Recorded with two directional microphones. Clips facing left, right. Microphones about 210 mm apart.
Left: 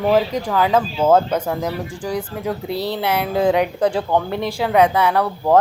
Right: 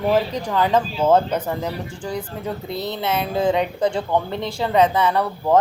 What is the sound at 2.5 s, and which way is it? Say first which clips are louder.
Speech: left 4 dB; 75° left (ahead or behind).